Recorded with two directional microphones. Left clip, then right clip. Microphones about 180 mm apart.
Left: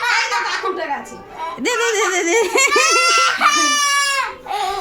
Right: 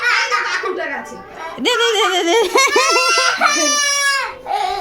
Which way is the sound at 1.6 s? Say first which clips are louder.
Right 3 dB; 5° left (ahead or behind).